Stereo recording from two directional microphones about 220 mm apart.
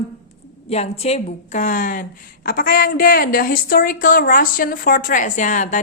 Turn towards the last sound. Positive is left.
turn(degrees=35)  # may be behind; listen again after turning